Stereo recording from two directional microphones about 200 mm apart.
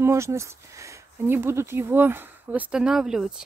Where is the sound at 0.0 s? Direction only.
15° right (ahead or behind).